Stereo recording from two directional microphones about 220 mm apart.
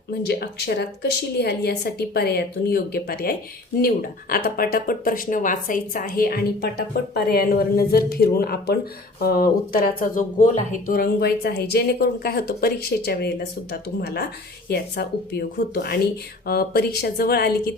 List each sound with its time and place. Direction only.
0.1 s speech: 50° left (ahead or behind)